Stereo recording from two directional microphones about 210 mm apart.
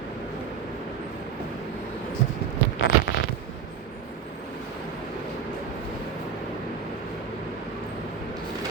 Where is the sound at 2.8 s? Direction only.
55° left (ahead or behind).